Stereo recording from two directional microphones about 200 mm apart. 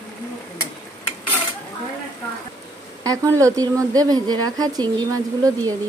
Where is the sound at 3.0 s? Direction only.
15° right (ahead or behind).